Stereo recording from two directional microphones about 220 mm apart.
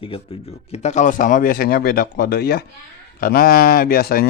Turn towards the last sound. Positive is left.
turn(degrees=45)  # may be behind; listen again after turning